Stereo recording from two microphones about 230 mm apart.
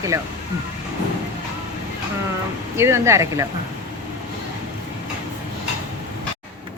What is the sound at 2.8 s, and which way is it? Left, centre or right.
Speech, centre.